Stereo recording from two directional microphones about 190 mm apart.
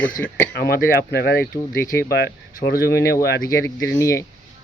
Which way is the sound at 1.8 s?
15° left (ahead or behind).